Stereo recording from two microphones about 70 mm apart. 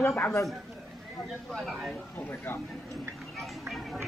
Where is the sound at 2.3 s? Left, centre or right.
Left.